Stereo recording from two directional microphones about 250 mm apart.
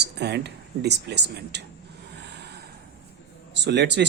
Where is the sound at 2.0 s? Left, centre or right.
Right.